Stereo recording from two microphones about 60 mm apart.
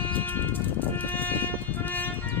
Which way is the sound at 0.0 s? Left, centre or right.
Left.